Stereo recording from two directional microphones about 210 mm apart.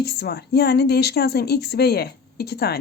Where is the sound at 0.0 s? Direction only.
50° left (ahead or behind).